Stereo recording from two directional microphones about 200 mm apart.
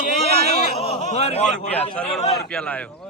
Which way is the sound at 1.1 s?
35° left (ahead or behind).